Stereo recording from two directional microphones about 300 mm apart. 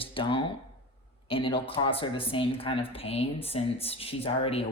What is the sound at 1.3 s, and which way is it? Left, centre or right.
Speech, centre.